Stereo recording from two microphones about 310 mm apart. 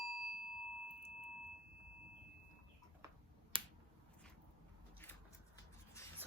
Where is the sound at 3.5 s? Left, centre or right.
Centre.